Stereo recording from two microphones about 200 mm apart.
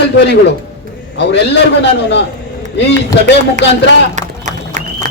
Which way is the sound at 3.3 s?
60° left (ahead or behind).